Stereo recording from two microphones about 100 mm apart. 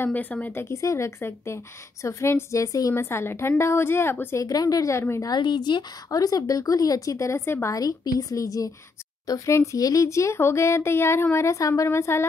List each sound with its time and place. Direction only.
0.0 s a woman's voice: 15° left (ahead or behind)
5.3 s a woman's voice: 45° left (ahead or behind); by 12.3 s 25° left (ahead or behind)